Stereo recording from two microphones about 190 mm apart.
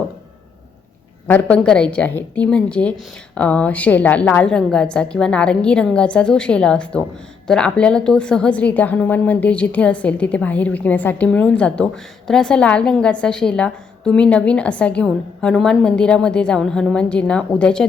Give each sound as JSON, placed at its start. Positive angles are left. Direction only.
{"t": 1.3, "sound": "a woman's voice", "side_deg": 5}